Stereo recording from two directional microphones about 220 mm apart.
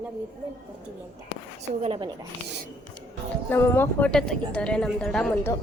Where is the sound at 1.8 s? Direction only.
25° right (ahead or behind).